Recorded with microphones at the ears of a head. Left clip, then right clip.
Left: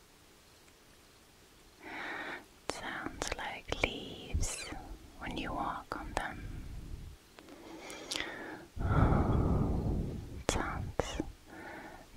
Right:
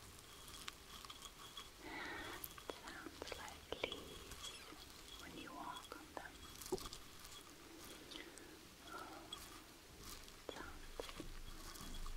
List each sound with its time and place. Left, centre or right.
1.9 s whispering: left
7.6 s whispering: left